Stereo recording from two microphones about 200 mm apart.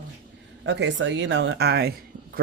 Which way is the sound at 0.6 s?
60° right (ahead or behind).